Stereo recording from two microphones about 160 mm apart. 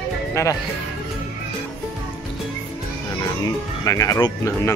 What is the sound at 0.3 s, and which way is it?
Speech, 20° left (ahead or behind).